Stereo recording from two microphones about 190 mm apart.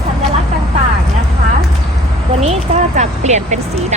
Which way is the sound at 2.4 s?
35° right (ahead or behind).